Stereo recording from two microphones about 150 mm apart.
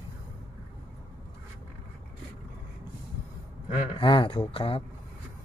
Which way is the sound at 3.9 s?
35° left (ahead or behind).